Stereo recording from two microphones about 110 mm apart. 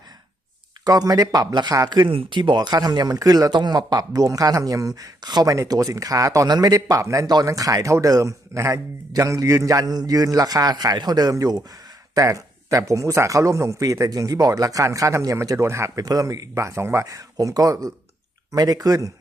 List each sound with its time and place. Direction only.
0.9 s a man's voice: 35° right (ahead or behind)
2.0 s a man's voice: 50° right (ahead or behind); by 19.1 s 30° right (ahead or behind)